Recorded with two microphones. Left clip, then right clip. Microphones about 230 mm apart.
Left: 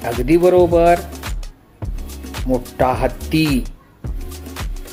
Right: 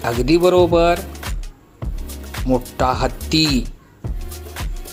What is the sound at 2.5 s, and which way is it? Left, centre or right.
Speech, right.